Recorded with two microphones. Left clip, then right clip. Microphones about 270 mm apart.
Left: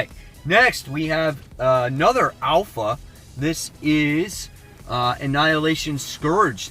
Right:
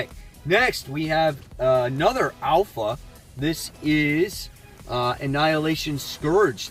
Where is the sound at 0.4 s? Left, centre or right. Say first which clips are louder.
Left 4 dB; centre.